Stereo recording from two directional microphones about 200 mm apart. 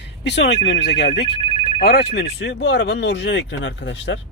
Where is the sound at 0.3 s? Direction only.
60° left (ahead or behind).